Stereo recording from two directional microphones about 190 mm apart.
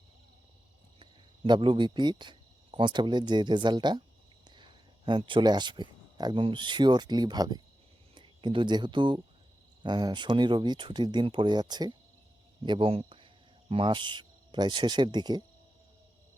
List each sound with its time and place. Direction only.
1.5 s speech: 25° right (ahead or behind)